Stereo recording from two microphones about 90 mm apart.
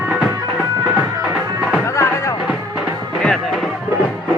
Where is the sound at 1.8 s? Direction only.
30° left (ahead or behind).